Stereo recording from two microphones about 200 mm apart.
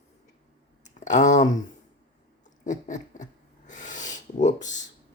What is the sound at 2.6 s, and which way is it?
Patter, 40° left (ahead or behind).